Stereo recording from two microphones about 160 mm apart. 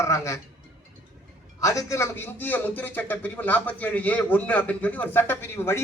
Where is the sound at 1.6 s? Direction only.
20° left (ahead or behind).